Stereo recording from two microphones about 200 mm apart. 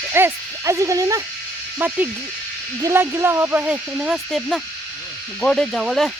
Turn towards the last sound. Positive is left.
turn(degrees=0)  # may be behind; listen again after turning